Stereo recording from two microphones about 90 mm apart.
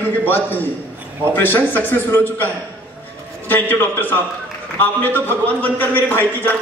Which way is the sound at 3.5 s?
20° left (ahead or behind).